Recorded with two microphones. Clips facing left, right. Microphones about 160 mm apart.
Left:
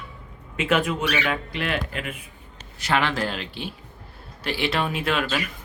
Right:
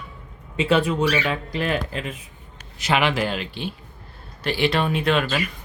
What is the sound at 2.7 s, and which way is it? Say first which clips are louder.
Speech: right 2 dB; 20° right (ahead or behind).